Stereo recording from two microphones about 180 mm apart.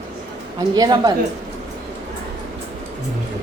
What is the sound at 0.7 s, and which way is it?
Speech, 20° right (ahead or behind).